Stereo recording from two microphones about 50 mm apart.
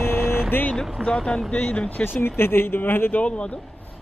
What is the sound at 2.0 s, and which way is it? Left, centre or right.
Speech, left.